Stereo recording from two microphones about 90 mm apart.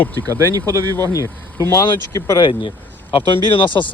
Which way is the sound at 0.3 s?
40° right (ahead or behind).